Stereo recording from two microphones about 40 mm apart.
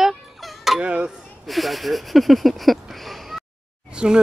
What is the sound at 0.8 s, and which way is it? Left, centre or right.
Speech, right.